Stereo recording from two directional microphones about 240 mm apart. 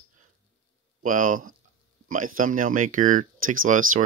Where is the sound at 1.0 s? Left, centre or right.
Right.